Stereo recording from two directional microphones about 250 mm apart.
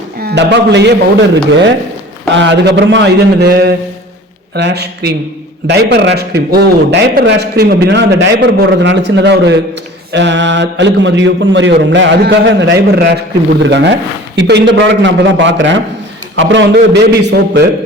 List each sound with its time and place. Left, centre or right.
0.2 s a man's voice: right
2.3 s a man's voice: right